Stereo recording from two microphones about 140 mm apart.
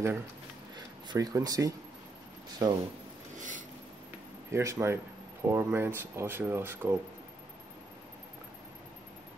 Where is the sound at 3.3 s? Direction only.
65° right (ahead or behind).